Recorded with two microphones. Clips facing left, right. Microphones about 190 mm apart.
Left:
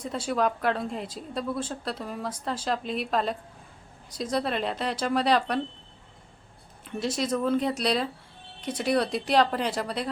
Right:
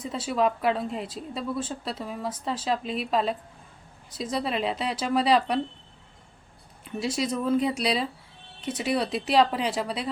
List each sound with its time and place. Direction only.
0.0 s a woman's voice: 5° right (ahead or behind)
6.8 s a woman's voice: 5° right (ahead or behind)